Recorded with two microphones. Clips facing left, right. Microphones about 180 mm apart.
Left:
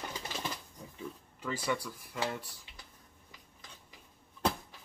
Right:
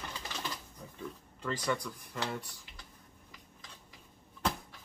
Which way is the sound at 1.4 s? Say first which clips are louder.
Right 1 dB; 5° left (ahead or behind).